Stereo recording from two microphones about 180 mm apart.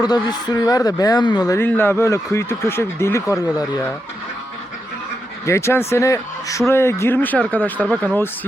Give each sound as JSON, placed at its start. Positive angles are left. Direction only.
{"t": 0.0, "sound": "speech", "side_deg": 25}
{"t": 5.5, "sound": "speech", "side_deg": 15}